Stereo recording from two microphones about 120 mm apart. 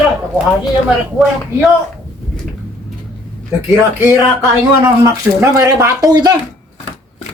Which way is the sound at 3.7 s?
20° right (ahead or behind).